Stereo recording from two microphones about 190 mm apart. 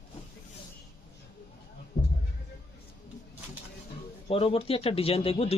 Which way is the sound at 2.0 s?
55° left (ahead or behind).